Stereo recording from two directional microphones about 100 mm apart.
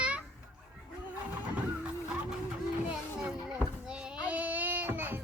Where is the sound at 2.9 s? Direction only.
10° right (ahead or behind).